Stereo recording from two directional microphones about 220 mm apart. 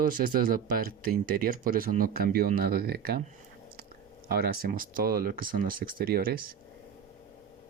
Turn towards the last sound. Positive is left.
turn(degrees=-40)  # may be behind; listen again after turning